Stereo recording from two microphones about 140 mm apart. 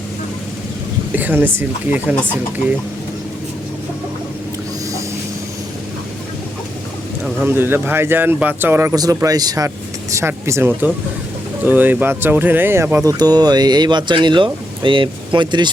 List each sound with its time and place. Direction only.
1.1 s speech: 15° right (ahead or behind)
7.4 s speech: 15° right (ahead or behind); by 15.7 s 35° right (ahead or behind)